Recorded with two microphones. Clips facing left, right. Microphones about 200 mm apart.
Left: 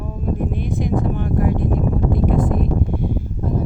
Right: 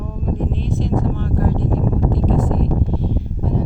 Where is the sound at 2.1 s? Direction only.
10° left (ahead or behind).